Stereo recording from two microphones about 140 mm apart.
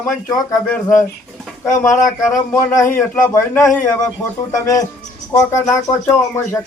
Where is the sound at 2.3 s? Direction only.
15° left (ahead or behind).